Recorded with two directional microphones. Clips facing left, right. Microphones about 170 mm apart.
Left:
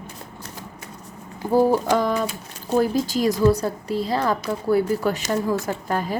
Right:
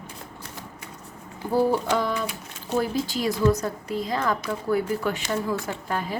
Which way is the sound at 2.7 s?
40° left (ahead or behind).